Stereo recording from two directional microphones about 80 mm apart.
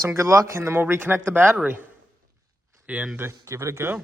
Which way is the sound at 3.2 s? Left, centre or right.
Right.